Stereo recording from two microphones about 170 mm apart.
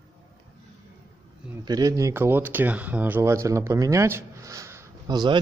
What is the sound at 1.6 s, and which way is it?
Speech, 20° right (ahead or behind).